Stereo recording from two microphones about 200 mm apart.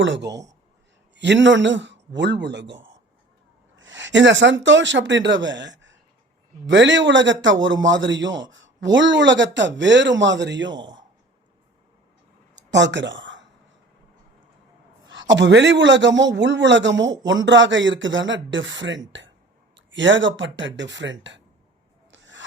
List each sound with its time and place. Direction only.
0.0 s a man's voice: 65° right (ahead or behind)
12.5 s a sound: 60° right (ahead or behind)
15.0 s a man's voice: 65° right (ahead or behind)
22.1 s rub: 70° right (ahead or behind)